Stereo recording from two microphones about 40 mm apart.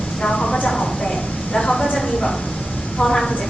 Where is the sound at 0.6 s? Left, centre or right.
Centre.